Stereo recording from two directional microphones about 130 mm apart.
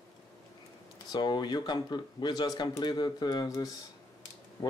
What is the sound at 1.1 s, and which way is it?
Speech, 35° left (ahead or behind).